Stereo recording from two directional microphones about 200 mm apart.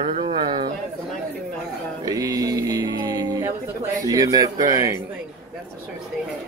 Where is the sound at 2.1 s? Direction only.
15° right (ahead or behind).